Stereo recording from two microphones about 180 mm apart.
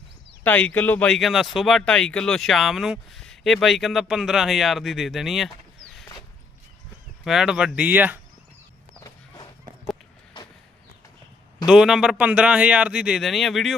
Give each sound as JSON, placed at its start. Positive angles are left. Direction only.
{"t": 0.4, "sound": "speech", "side_deg": 10}
{"t": 7.3, "sound": "speech", "side_deg": -5}
{"t": 9.0, "sound": "a sound", "side_deg": 20}
{"t": 11.6, "sound": "speech", "side_deg": -5}